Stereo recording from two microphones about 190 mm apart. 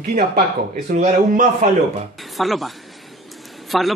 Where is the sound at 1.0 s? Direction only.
40° right (ahead or behind).